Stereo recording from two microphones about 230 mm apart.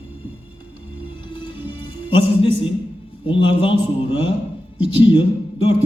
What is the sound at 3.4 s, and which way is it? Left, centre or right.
A man's voice, left.